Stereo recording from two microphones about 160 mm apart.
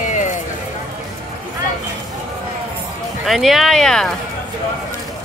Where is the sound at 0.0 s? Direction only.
50° left (ahead or behind).